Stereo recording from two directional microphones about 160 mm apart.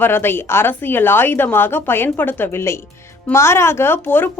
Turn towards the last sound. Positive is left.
turn(degrees=10)  # may be behind; listen again after turning